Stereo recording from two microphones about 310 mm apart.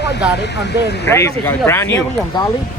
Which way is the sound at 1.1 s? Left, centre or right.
Centre.